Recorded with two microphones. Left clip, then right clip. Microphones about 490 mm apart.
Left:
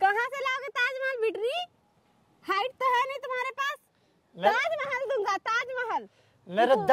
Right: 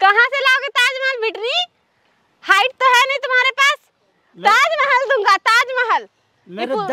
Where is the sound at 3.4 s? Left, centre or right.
Right.